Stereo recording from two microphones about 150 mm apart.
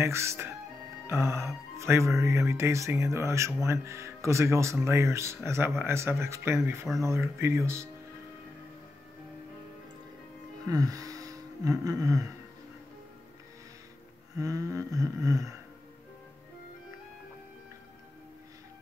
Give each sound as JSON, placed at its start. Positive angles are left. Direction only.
{"t": 0.0, "sound": "speech", "side_deg": -20}
{"t": 10.7, "sound": "music", "side_deg": -25}
{"t": 14.4, "sound": "speech", "side_deg": -20}